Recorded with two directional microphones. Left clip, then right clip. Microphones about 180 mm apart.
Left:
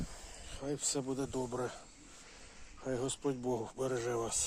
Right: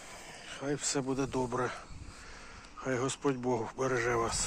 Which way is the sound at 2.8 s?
15° left (ahead or behind).